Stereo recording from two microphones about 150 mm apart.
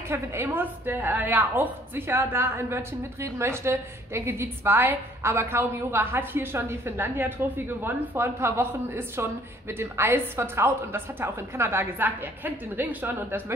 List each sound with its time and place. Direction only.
0.1 s a woman's voice: 15° right (ahead or behind)